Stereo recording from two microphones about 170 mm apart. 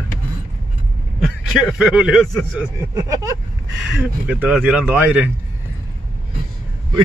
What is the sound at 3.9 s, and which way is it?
Speech, 5° right (ahead or behind).